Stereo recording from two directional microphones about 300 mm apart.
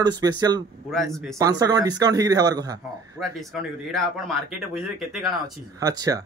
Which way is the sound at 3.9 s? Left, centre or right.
Centre.